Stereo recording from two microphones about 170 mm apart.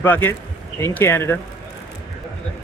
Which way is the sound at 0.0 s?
10° left (ahead or behind).